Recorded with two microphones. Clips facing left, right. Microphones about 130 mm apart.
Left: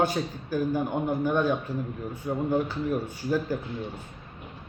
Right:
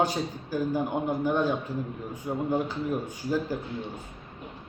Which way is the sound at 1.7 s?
45° right (ahead or behind).